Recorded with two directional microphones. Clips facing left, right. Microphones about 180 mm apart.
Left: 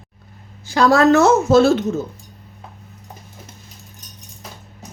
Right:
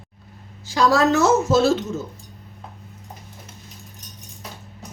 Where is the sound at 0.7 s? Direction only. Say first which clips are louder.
Left 4 dB; 60° left (ahead or behind).